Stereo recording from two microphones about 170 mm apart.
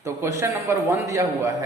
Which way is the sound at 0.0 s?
15° right (ahead or behind).